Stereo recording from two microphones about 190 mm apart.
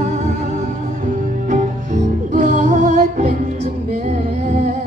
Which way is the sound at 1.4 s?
40° right (ahead or behind).